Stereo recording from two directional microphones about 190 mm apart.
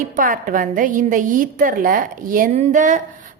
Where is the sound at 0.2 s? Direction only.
45° right (ahead or behind).